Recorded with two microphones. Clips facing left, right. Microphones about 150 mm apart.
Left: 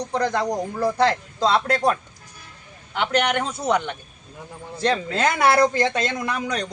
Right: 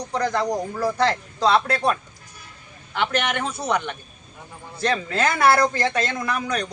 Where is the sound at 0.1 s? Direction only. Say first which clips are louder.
Even; 25° left (ahead or behind).